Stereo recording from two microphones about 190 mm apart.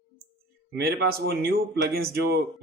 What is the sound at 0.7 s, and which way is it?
A man's voice, 55° right (ahead or behind).